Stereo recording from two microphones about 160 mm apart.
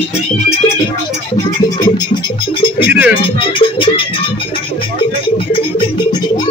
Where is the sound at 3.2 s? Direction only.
35° left (ahead or behind).